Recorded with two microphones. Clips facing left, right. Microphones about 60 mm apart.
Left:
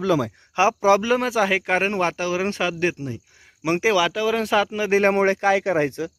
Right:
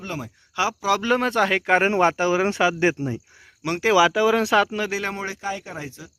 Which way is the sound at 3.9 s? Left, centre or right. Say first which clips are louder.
Right 3 dB; centre.